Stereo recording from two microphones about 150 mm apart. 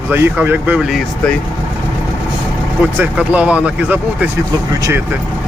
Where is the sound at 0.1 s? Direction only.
15° right (ahead or behind).